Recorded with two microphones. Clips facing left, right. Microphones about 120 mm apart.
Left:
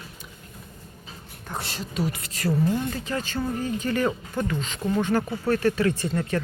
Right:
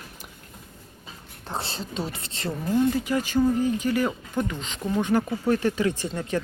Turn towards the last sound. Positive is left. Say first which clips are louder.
# left 2 dB
turn(degrees=-15)  # may be behind; listen again after turning